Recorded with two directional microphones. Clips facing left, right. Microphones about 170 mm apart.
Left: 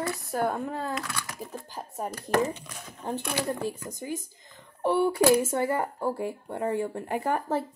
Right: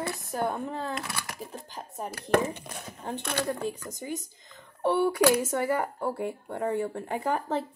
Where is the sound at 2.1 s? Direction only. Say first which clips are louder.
Right 1 dB; 60° right (ahead or behind).